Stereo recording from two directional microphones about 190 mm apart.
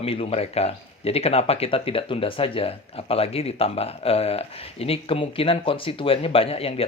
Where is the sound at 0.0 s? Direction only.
30° left (ahead or behind).